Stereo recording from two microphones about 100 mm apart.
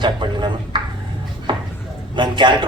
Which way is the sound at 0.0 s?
50° right (ahead or behind).